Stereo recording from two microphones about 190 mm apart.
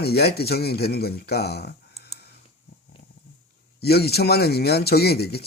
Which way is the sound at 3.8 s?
55° left (ahead or behind).